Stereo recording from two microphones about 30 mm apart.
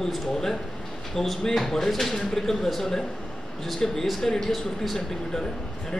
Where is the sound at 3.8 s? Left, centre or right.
Left.